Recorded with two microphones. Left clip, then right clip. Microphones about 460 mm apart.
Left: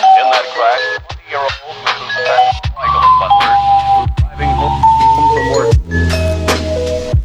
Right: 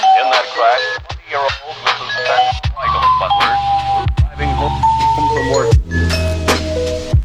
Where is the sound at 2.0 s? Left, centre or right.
Right.